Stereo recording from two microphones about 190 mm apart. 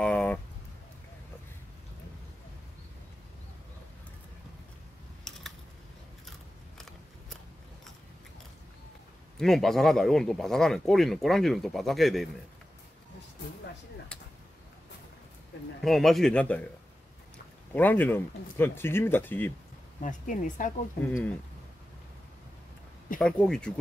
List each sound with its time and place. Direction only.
0.0 s a sound: 5° left (ahead or behind)
5.3 s a sound: 5° left (ahead or behind)
9.4 s speech: centre (ahead or behind)
15.8 s speech: centre (ahead or behind)
17.7 s speech: 10° left (ahead or behind)
20.0 s speech: 45° left (ahead or behind)
21.1 s speech: 10° left (ahead or behind)
23.1 s speech: 5° left (ahead or behind)